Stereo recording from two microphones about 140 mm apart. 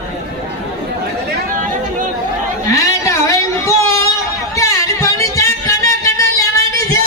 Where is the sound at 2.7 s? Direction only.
20° left (ahead or behind).